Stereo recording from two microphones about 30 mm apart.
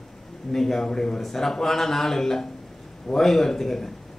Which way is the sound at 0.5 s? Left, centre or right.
Centre.